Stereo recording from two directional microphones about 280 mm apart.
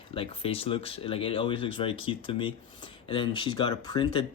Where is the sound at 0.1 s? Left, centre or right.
Centre.